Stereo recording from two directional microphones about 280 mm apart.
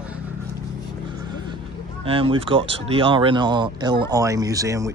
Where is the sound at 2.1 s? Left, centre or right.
Centre.